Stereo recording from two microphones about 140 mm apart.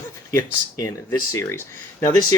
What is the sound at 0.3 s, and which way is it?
Speech, 25° left (ahead or behind).